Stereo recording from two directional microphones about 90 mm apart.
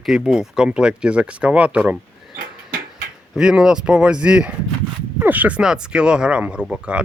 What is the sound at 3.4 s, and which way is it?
Speech, 10° right (ahead or behind).